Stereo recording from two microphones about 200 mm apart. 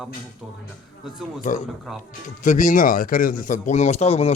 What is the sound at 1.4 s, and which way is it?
Speech, 40° left (ahead or behind).